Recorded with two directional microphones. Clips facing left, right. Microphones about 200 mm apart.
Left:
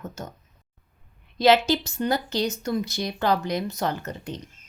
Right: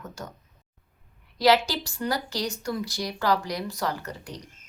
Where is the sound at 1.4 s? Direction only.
25° left (ahead or behind).